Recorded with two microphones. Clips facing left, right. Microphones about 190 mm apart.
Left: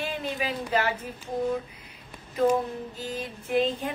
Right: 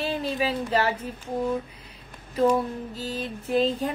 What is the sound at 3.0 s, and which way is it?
Speech, 35° right (ahead or behind).